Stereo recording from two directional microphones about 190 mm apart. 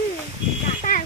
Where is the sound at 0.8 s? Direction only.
45° left (ahead or behind).